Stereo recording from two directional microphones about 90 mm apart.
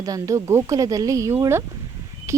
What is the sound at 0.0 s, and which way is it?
A woman's voice, 40° right (ahead or behind).